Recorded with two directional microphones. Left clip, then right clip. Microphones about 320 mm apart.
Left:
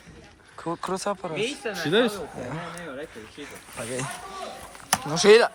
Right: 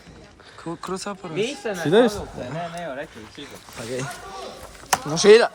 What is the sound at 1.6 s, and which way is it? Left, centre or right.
Speech, right.